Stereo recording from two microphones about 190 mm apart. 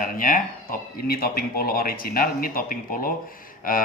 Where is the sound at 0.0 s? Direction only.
45° left (ahead or behind).